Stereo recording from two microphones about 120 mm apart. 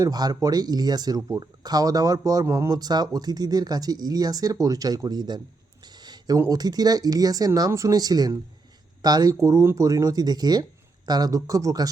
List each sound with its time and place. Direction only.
0.0 s speech: 30° right (ahead or behind)
5.8 s a sound: 35° right (ahead or behind)
6.5 s speech: 35° right (ahead or behind)